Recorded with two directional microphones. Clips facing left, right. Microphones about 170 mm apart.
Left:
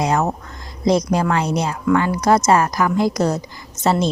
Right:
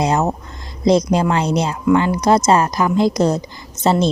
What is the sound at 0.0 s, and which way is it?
A woman's voice, 25° right (ahead or behind).